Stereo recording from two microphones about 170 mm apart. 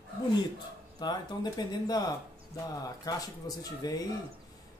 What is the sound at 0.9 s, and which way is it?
Speech, 25° left (ahead or behind).